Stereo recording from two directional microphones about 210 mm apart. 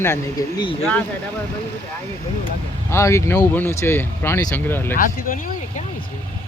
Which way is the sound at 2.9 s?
15° left (ahead or behind).